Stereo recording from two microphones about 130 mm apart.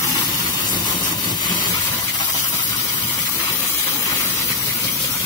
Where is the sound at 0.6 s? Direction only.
35° left (ahead or behind).